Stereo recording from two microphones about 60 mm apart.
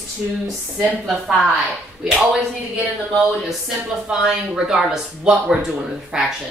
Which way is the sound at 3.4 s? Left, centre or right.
Centre.